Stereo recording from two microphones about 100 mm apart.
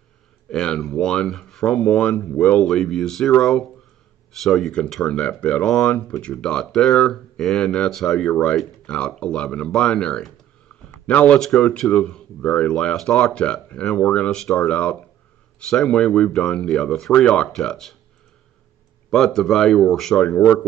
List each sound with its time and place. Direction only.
0.5 s speech: 5° left (ahead or behind)
2.7 s speech: 5° left (ahead or behind)
19.0 s speech: 5° left (ahead or behind)
20.3 s speech: 20° left (ahead or behind)